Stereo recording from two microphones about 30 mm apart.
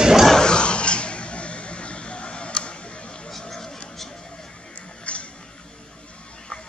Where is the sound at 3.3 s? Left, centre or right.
Centre.